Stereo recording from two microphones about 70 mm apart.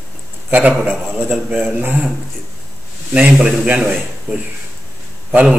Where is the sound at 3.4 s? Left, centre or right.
Centre.